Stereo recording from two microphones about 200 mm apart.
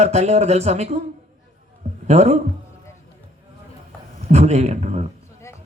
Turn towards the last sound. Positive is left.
turn(degrees=-35)  # may be behind; listen again after turning